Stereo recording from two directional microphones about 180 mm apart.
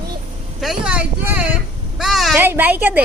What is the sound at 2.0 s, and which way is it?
Fowl, centre (ahead or behind).